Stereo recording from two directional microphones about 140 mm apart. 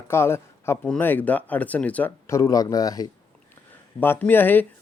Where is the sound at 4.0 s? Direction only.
15° left (ahead or behind).